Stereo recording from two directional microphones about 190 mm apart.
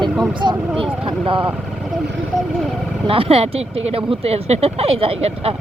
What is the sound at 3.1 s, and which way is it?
Speech, 30° right (ahead or behind).